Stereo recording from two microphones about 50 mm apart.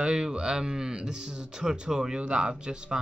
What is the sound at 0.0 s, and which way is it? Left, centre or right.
Speech, centre.